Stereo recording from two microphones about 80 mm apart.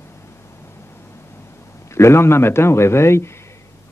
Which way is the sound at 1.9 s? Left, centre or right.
Left.